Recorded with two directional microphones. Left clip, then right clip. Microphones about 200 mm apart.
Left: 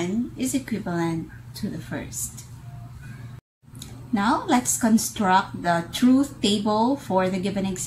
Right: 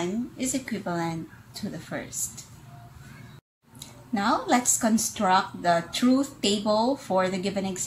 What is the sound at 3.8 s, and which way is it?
A woman's voice, 10° right (ahead or behind).